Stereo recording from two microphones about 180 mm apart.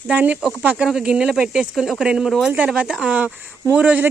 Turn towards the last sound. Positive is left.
turn(degrees=-5)  # may be behind; listen again after turning